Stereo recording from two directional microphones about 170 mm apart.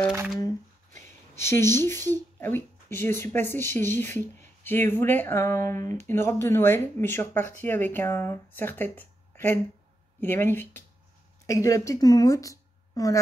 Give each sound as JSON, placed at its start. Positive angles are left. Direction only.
{"t": 1.3, "sound": "speech", "side_deg": 15}